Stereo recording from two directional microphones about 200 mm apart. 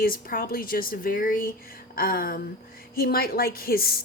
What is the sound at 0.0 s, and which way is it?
A woman's voice, 45° left (ahead or behind).